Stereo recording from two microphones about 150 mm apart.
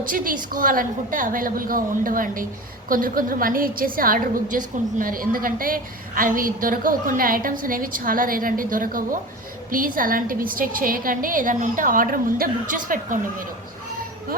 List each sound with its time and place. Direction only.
0.0 s a woman's voice: 70° right (ahead or behind)